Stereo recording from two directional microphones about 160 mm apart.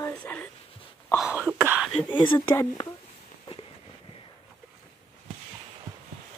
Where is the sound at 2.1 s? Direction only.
30° left (ahead or behind).